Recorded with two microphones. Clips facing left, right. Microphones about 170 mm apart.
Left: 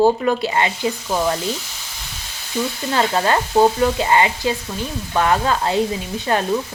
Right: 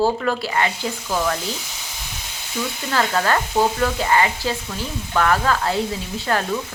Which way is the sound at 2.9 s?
20° left (ahead or behind).